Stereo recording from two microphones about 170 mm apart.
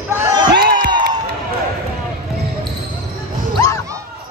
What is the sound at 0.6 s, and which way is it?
Music, 70° right (ahead or behind).